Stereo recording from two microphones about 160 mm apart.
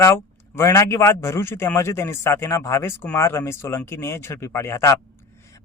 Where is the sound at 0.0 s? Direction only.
20° left (ahead or behind).